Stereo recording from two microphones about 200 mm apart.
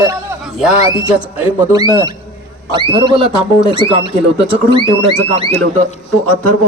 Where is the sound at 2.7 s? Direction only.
25° right (ahead or behind).